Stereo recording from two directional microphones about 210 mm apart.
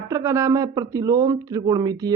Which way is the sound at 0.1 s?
15° right (ahead or behind).